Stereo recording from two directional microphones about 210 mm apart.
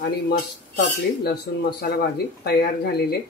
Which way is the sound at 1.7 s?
50° left (ahead or behind).